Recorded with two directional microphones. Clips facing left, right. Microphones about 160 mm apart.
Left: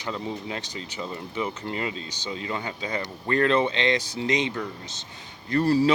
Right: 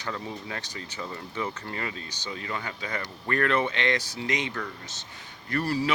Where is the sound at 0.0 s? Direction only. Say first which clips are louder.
Left 3 dB; 20° left (ahead or behind).